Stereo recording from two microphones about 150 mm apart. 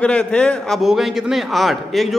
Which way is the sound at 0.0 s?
5° left (ahead or behind).